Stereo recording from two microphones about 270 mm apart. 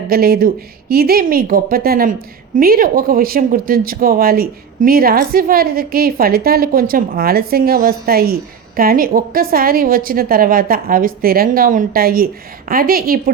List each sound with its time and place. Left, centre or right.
0.1 s speech: right